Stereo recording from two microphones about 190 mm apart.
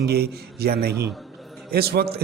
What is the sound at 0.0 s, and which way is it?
A man's voice, 55° right (ahead or behind).